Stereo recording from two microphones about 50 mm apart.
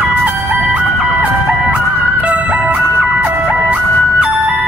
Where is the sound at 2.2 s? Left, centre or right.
Right.